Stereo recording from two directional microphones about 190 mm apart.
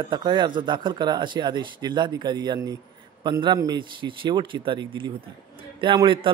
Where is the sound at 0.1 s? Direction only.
25° right (ahead or behind).